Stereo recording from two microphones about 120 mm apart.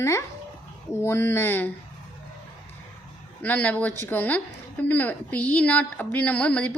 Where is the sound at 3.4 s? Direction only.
15° left (ahead or behind).